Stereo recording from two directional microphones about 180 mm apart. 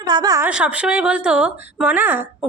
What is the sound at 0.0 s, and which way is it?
Speech, 25° right (ahead or behind).